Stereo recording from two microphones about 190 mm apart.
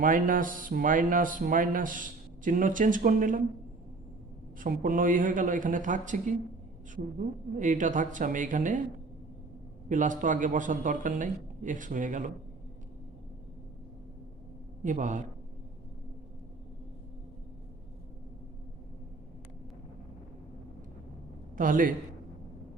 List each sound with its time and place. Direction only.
0.0 s speech: 45° right (ahead or behind)
4.6 s speech: 45° right (ahead or behind)
9.9 s speech: 40° right (ahead or behind)
14.8 s a man's voice: 40° right (ahead or behind)
21.6 s speech: 45° right (ahead or behind)